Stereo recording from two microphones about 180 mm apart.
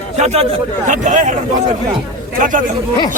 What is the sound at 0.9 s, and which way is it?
Speech, 45° right (ahead or behind).